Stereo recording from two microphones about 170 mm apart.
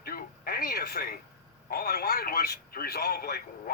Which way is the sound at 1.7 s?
65° left (ahead or behind).